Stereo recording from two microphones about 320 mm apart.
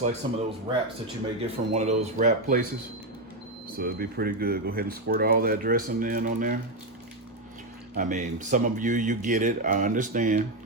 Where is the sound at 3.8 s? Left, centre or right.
Right.